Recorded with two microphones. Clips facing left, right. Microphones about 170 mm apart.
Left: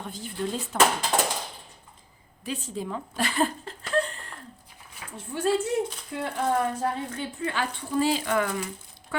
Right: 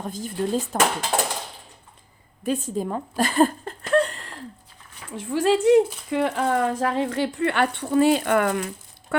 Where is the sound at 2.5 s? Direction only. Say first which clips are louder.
Right 7 dB; 50° right (ahead or behind).